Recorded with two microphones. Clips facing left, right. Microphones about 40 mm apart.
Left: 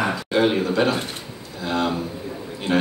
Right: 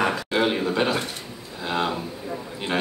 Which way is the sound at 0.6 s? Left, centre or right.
Centre.